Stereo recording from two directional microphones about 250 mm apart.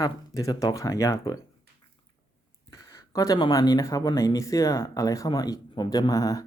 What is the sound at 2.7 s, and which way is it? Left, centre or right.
Speech, centre.